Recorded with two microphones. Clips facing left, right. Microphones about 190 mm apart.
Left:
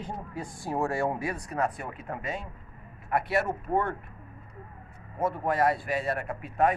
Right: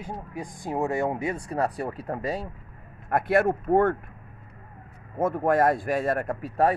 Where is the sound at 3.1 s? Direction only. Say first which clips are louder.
Right 5 dB; 50° right (ahead or behind).